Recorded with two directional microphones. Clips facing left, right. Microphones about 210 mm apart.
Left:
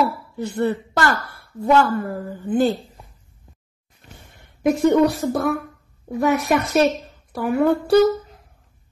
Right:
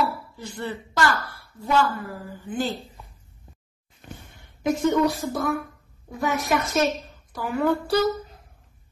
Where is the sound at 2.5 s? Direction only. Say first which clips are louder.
Left 9 dB; 55° left (ahead or behind).